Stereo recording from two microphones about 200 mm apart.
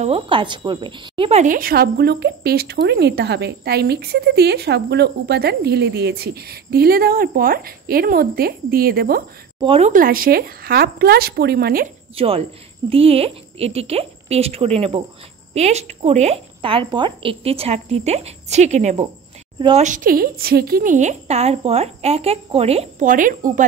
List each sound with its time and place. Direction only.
0.0 s speech: 25° right (ahead or behind)
1.4 s speech: 45° right (ahead or behind)
9.6 s speech: 30° right (ahead or behind); by 11.9 s 50° right (ahead or behind)
12.2 s a woman's voice: 30° right (ahead or behind)